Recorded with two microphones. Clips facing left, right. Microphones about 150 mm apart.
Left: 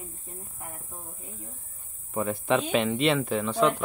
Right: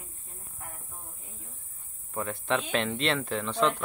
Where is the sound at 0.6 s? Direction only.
20° left (ahead or behind).